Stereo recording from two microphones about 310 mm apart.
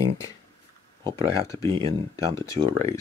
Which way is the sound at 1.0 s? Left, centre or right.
Centre.